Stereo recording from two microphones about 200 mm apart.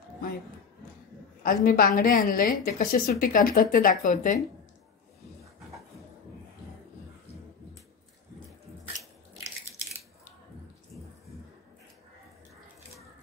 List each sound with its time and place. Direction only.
1.4 s a woman's voice: 45° left (ahead or behind)